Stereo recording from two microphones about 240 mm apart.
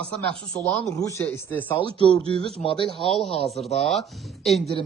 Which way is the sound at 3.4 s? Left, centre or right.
Centre.